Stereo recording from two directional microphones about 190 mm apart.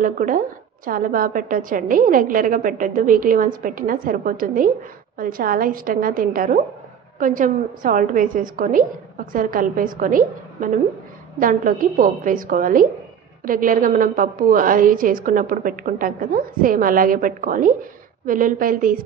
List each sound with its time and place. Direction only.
0.0 s a woman's voice: 45° right (ahead or behind)